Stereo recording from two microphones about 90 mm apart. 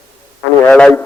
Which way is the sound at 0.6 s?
10° left (ahead or behind).